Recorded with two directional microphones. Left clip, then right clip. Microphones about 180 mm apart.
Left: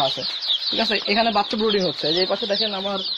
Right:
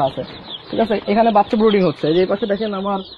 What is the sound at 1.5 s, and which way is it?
Speech, 30° right (ahead or behind).